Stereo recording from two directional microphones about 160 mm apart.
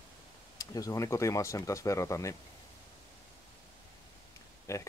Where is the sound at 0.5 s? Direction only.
20° left (ahead or behind).